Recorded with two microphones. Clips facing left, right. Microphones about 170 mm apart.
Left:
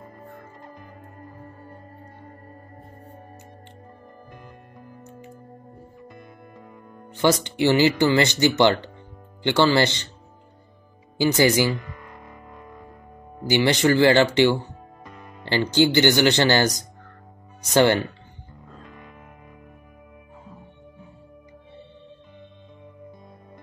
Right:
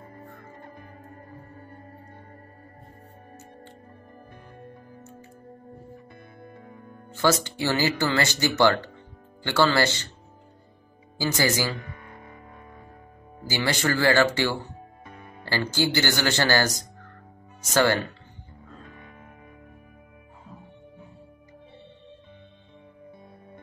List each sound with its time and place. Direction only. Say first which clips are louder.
7.1 s speech: left 3 dB; 15° left (ahead or behind)
11.1 s speech: left 6 dB; 20° left (ahead or behind)
13.5 s speech: left 7 dB; 20° left (ahead or behind)